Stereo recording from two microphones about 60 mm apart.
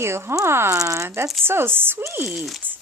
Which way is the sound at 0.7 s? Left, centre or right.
Right.